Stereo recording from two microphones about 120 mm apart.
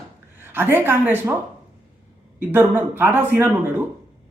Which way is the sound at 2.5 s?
15° right (ahead or behind).